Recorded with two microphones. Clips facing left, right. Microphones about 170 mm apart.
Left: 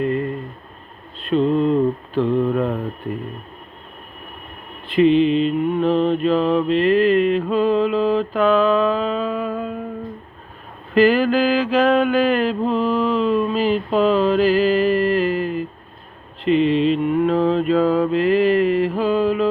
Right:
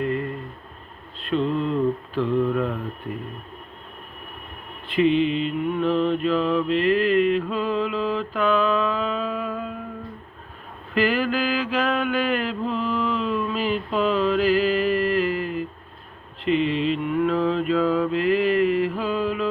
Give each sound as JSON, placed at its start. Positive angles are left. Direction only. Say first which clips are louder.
{"t": 1.3, "sound": "mantra", "louder": "left 6 dB", "side_deg": 20}
{"t": 2.2, "sound": "mantra", "louder": "left 3 dB", "side_deg": 60}
{"t": 4.9, "sound": "mantra", "louder": "left 5 dB", "side_deg": -15}
{"t": 5.6, "sound": "mantra", "louder": "left 4 dB", "side_deg": 30}
{"t": 10.9, "sound": "mantra", "louder": "left 7 dB", "side_deg": 30}
{"t": 16.4, "sound": "mantra", "louder": "left 5 dB", "side_deg": -15}
{"t": 17.0, "sound": "mantra", "louder": "left 4 dB", "side_deg": 25}